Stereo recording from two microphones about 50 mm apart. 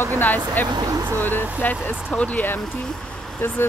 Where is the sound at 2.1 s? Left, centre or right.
Left.